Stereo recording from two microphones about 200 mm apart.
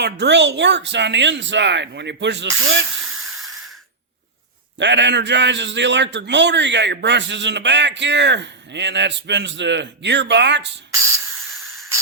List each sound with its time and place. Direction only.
0.0 s a man's voice: 60° right (ahead or behind)
3.0 s a sound: centre (ahead or behind)
4.8 s a man's voice: 60° right (ahead or behind)